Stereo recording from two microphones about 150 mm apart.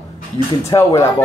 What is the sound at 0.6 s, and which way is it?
Speech, 20° left (ahead or behind).